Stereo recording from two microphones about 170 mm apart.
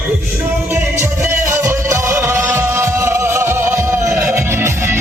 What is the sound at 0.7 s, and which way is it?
Music, 15° right (ahead or behind).